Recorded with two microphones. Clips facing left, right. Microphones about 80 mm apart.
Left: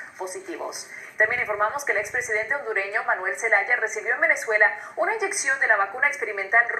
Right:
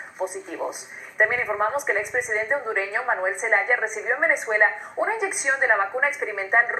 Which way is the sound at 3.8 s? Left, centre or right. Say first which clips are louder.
Even; centre.